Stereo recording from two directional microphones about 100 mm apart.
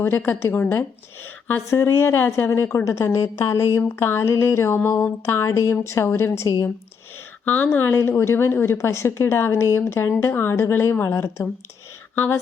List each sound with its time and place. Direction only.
0.0 s a woman's voice: 20° left (ahead or behind)
7.4 s a woman's voice: 15° left (ahead or behind)